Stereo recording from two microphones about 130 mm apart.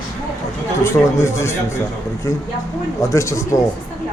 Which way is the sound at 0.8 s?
20° left (ahead or behind).